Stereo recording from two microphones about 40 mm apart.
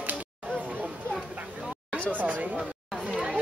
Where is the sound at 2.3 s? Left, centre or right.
Right.